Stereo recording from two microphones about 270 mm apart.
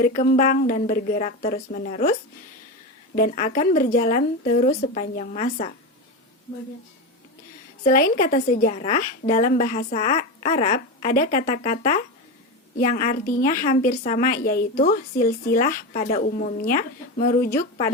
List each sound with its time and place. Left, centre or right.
0.0 s a woman's voice: left
3.2 s a woman's voice: left
7.9 s a woman's voice: left
17.5 s a woman's voice: centre